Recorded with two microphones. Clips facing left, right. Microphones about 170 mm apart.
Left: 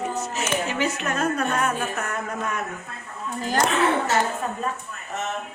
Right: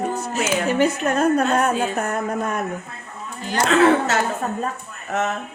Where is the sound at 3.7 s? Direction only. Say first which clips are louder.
Right 10 dB; 80° right.